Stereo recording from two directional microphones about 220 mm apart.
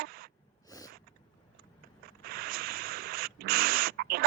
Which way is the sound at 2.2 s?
45° right (ahead or behind).